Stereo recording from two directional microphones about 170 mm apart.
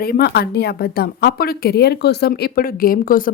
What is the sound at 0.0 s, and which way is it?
A woman's voice, 65° left (ahead or behind).